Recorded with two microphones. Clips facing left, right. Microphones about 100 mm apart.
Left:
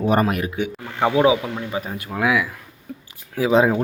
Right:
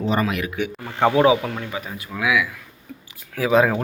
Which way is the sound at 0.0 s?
50° left (ahead or behind).